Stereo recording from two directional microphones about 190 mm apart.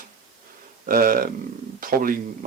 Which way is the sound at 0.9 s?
50° right (ahead or behind).